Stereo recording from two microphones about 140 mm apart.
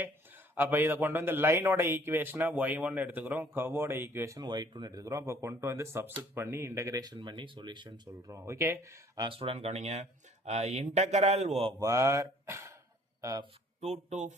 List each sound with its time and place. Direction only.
0.5 s a man's voice: 15° right (ahead or behind)
4.4 s speech: 30° right (ahead or behind)
8.4 s speech: 20° right (ahead or behind)
9.3 s speech: 45° right (ahead or behind)
11.8 s speech: 20° right (ahead or behind)
13.8 s speech: 55° right (ahead or behind)